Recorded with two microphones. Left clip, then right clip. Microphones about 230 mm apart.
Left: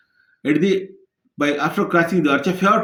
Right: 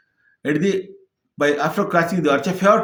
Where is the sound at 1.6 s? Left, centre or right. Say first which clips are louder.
Left 1 dB; centre.